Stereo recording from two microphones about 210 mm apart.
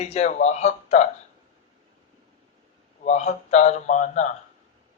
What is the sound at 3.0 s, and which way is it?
A man's voice, 35° left (ahead or behind).